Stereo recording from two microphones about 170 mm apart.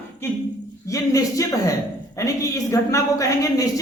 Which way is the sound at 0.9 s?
20° left (ahead or behind).